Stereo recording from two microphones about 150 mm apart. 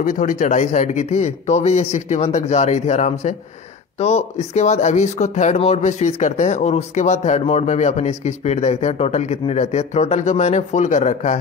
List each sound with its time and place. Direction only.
0.0 s speech: 60° left (ahead or behind)